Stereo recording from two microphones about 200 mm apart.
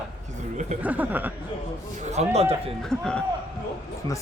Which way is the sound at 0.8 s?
10° right (ahead or behind).